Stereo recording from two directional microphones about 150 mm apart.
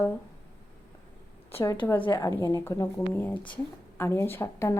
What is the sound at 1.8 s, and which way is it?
A woman's voice, 15° left (ahead or behind).